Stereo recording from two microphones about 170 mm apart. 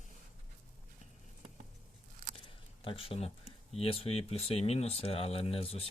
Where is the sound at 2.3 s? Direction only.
35° left (ahead or behind).